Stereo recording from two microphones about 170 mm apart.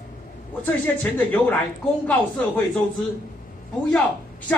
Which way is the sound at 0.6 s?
10° left (ahead or behind).